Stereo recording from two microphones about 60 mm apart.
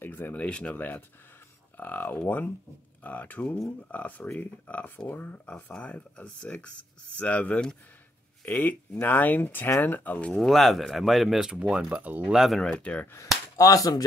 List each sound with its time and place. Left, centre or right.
0.0 s speech: left
10.3 s speech: centre
11.3 s speech: centre
11.9 s speech: right
12.3 s speech: centre
12.6 s speech: left
13.6 s cap gun: left